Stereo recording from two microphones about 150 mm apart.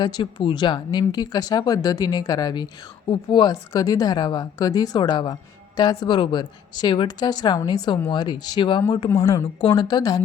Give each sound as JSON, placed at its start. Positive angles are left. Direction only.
{"t": 0.0, "sound": "a woman's voice", "side_deg": 30}
{"t": 9.0, "sound": "a woman's voice", "side_deg": 20}
{"t": 9.6, "sound": "a woman's voice", "side_deg": 35}